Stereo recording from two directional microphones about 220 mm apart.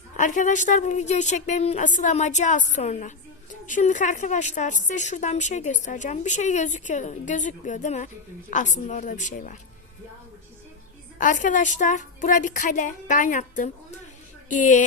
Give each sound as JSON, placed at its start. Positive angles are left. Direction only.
{"t": 0.2, "sound": "a woman's voice", "side_deg": 35}
{"t": 11.2, "sound": "a woman's voice", "side_deg": 35}